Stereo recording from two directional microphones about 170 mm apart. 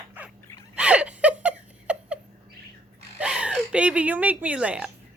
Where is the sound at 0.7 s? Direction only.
5° right (ahead or behind).